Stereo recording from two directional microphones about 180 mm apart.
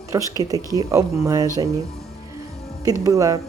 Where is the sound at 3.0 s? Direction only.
20° right (ahead or behind).